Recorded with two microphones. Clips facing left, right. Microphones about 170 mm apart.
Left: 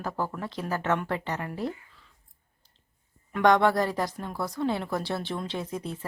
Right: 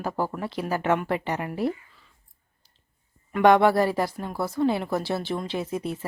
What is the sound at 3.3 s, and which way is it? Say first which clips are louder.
A woman's voice: right 4 dB; 10° right (ahead or behind).